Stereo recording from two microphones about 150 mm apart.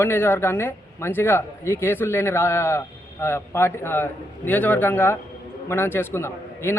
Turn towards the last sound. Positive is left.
turn(degrees=15)  # may be behind; listen again after turning